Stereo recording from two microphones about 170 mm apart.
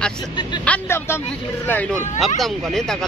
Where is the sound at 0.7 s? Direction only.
15° left (ahead or behind).